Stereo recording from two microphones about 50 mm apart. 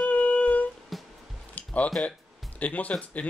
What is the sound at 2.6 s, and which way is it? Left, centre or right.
Speech, left.